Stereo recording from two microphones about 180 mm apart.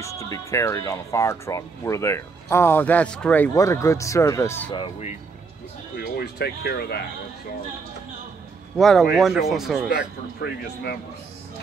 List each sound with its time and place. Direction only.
0.0 s speech: 15° left (ahead or behind)
5.9 s speech: 60° left (ahead or behind)
8.7 s speech: centre (ahead or behind)
10.4 s speech: 60° left (ahead or behind)